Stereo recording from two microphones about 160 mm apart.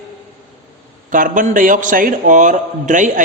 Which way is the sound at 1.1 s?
55° right (ahead or behind).